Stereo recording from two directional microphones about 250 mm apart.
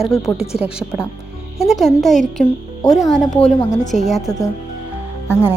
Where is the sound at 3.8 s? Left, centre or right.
Left.